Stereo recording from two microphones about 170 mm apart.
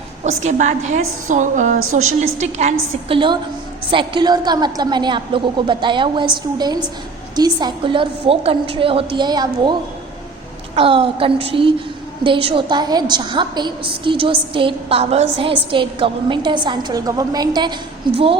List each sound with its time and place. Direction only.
0.3 s a woman's voice: 45° right (ahead or behind); by 9.7 s 25° right (ahead or behind)
10.8 s a woman's voice: 30° right (ahead or behind)